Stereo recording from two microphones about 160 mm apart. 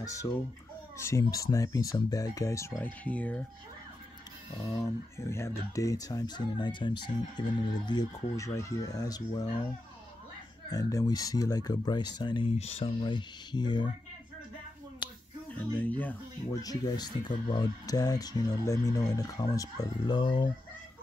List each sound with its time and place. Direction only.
0.0 s speech: 20° left (ahead or behind)
4.6 s speech: 20° left (ahead or behind)
10.7 s speech: 20° left (ahead or behind)
15.5 s speech: 10° left (ahead or behind)
16.5 s speech: 25° left (ahead or behind)